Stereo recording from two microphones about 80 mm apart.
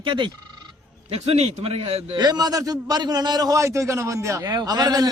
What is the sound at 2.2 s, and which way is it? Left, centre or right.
A man's voice, right.